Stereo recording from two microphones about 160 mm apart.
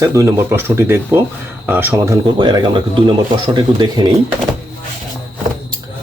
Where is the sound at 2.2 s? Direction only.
30° right (ahead or behind).